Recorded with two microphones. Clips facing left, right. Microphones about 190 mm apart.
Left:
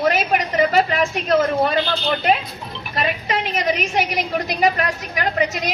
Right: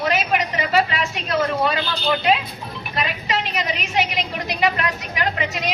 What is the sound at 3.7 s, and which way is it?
A woman's voice, 45° left (ahead or behind).